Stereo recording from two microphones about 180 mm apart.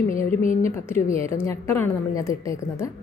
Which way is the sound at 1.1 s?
15° left (ahead or behind).